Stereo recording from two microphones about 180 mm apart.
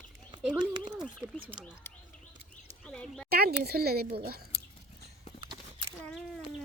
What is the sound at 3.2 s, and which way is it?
Speech, 60° right (ahead or behind).